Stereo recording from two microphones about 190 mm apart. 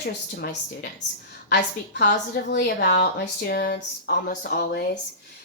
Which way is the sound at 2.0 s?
55° left (ahead or behind).